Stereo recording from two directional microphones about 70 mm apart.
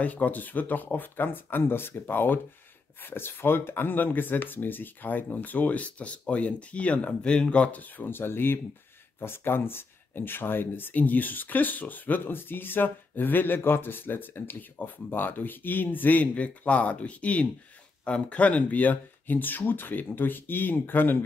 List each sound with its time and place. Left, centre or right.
0.0 s speech: left